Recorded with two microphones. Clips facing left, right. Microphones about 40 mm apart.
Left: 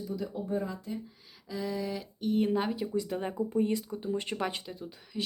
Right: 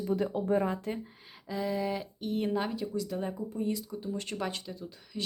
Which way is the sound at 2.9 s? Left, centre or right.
Left.